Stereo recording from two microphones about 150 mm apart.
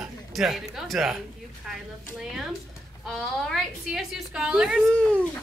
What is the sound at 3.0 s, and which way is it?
A woman's voice, centre (ahead or behind).